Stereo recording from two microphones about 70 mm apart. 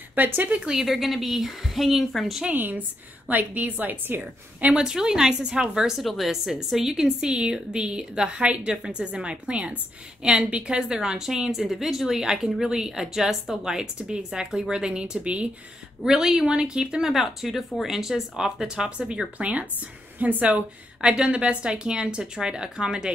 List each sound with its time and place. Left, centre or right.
0.1 s a woman's voice: right
0.7 s speech: centre
2.4 s a woman's voice: right
4.7 s speech: centre